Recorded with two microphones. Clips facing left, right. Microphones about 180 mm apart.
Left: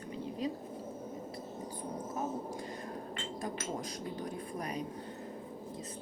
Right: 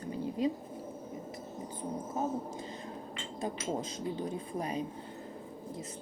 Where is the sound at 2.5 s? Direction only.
25° right (ahead or behind).